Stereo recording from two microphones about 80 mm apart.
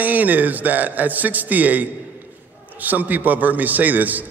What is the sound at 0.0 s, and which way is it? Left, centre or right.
A man's voice, right.